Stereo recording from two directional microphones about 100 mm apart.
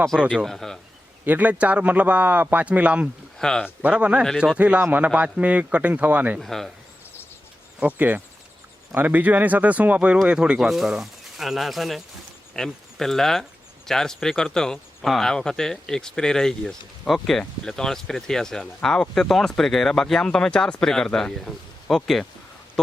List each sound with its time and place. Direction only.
0.2 s speech: 5° right (ahead or behind)
0.4 s speech: 5° left (ahead or behind)
1.2 s speech: 15° right (ahead or behind)
3.3 s speech: 5° left (ahead or behind)
3.8 s speech: 10° right (ahead or behind)
6.4 s speech: 5° left (ahead or behind)
7.8 s speech: 15° right (ahead or behind); by 22.3 s 5° left (ahead or behind)